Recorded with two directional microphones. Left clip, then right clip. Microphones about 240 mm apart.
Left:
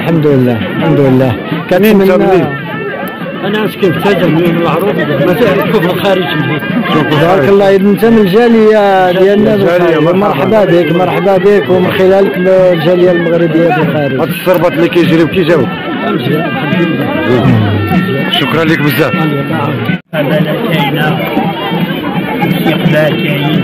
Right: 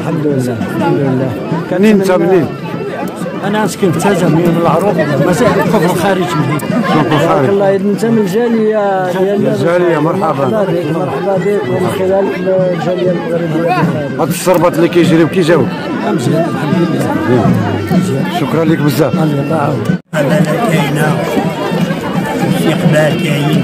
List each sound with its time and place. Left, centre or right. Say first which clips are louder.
1.8 s speech: left 3 dB; centre
8.7 s speech: left 6 dB; left
14.5 s speech: left 1 dB; centre
18.6 s speech: left 2 dB; centre